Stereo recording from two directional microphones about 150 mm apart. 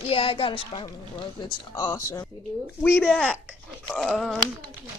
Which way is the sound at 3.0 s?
5° left (ahead or behind).